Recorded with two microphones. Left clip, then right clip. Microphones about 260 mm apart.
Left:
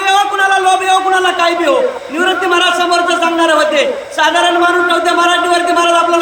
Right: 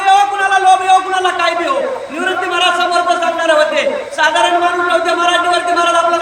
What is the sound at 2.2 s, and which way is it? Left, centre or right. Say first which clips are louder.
A man's voice: left 3 dB; centre.